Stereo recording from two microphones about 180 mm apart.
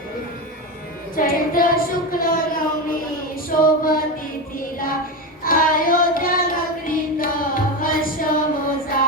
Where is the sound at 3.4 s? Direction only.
50° left (ahead or behind).